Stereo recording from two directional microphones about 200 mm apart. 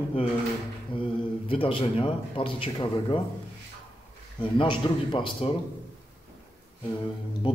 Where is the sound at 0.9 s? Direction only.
25° left (ahead or behind).